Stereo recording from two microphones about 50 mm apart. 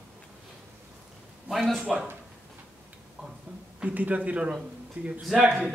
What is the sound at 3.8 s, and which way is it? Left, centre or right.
A man's voice, right.